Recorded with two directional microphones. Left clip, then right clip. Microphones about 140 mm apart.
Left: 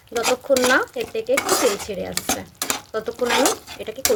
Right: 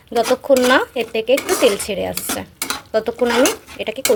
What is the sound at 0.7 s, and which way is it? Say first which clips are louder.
Dishes: right 4 dB; 35° right (ahead or behind).